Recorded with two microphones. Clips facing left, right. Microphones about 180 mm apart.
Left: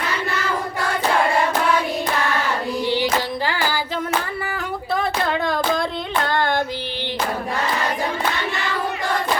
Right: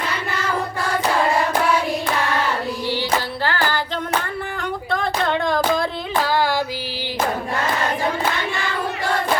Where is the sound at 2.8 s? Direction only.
15° left (ahead or behind).